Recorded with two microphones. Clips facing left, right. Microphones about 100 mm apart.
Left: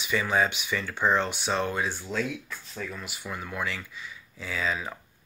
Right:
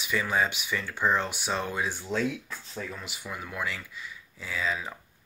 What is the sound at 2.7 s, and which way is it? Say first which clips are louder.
Speech: left 1 dB; 20° right (ahead or behind).